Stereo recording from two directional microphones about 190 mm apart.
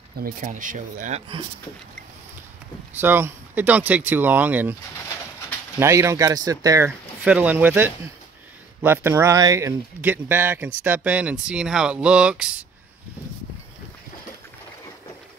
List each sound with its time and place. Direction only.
0.2 s speech: 45° right (ahead or behind)
3.0 s speech: 10° right (ahead or behind)
5.8 s speech: 15° right (ahead or behind)